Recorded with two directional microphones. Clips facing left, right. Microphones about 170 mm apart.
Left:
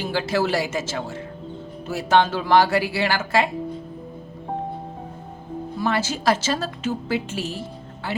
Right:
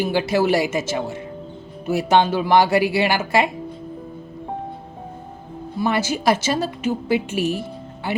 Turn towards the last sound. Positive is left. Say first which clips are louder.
# right 5 dB
turn(degrees=-15)  # may be behind; listen again after turning